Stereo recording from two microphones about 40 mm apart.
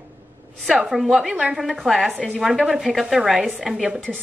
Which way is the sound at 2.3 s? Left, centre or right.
Centre.